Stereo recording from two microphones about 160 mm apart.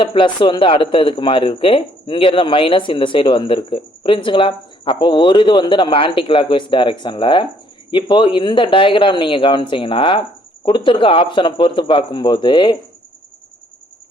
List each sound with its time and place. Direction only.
0.0 s a man's voice: 30° left (ahead or behind)